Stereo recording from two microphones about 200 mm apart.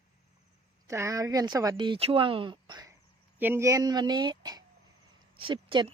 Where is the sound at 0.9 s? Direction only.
15° right (ahead or behind).